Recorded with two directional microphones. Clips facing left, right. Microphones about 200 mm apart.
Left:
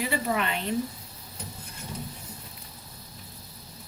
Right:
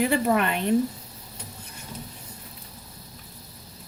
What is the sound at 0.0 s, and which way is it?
Speech, 55° right (ahead or behind).